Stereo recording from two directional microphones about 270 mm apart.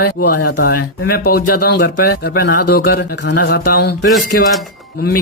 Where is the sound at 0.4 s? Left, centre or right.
Left.